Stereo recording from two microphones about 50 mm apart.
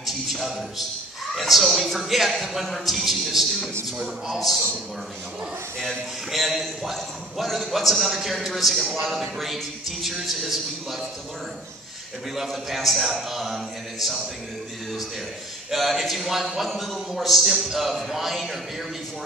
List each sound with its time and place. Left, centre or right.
0.0 s a man's voice: centre
6.3 s a man's voice: centre
12.4 s a man's voice: centre
15.7 s a man's voice: centre